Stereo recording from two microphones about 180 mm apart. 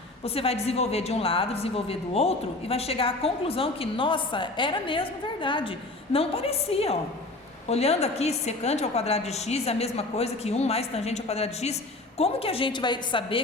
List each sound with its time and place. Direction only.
0.3 s a woman's voice: 35° left (ahead or behind)